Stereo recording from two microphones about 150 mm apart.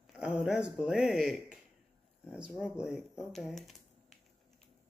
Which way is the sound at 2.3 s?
5° right (ahead or behind).